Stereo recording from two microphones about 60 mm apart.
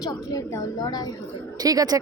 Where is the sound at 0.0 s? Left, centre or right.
Left.